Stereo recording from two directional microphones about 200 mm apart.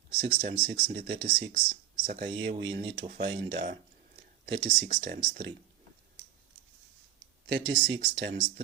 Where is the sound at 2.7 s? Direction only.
25° right (ahead or behind).